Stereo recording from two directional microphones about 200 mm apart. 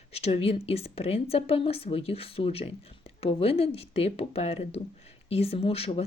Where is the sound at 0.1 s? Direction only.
30° left (ahead or behind).